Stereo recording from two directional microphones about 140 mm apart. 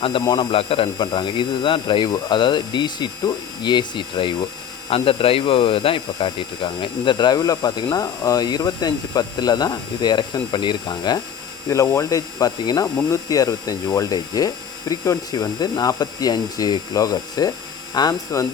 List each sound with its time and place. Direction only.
0.0 s speech: 35° left (ahead or behind)